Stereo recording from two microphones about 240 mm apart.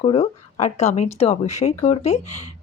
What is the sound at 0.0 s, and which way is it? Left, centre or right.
Speech, left.